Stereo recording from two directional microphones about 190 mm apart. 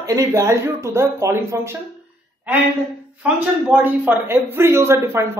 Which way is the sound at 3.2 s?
10° right (ahead or behind).